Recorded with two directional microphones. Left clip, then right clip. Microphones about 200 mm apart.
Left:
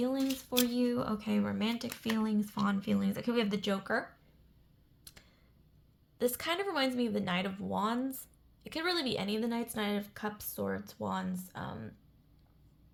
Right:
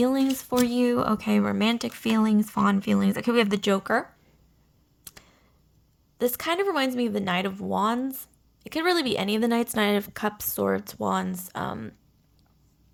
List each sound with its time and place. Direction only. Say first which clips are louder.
0.0 s speech: right 10 dB; 35° right (ahead or behind)
5.0 s a sound: right 8 dB; 30° right (ahead or behind)
6.1 s speech: right 7 dB; 30° right (ahead or behind)